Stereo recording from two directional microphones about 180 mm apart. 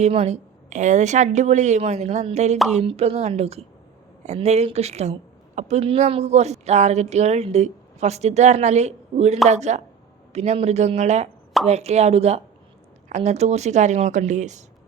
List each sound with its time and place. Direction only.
0.0 s a woman's voice: 35° right (ahead or behind)